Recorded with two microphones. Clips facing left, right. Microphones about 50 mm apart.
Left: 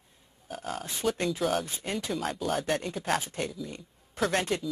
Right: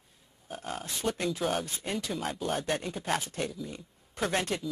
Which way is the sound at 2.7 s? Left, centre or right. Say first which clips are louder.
Left 2 dB; centre.